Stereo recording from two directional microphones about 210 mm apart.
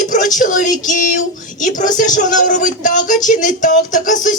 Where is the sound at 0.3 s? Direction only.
40° left (ahead or behind).